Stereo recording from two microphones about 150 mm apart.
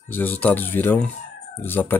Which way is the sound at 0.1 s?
10° left (ahead or behind).